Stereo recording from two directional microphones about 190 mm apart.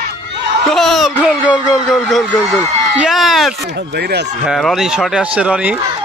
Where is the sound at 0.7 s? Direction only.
Centre (ahead or behind).